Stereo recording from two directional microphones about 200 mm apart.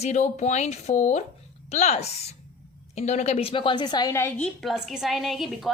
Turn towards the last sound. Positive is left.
turn(degrees=0)  # may be behind; listen again after turning